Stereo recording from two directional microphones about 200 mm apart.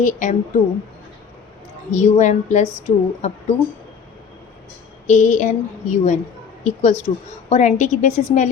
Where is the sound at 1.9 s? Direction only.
35° left (ahead or behind).